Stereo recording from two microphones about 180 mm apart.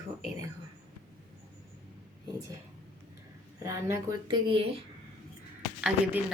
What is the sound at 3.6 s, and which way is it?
Speech, 15° right (ahead or behind).